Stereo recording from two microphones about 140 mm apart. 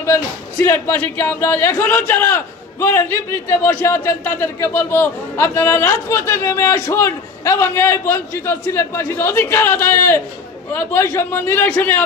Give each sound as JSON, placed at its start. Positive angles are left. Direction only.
{"t": 0.0, "sound": "speech", "side_deg": 20}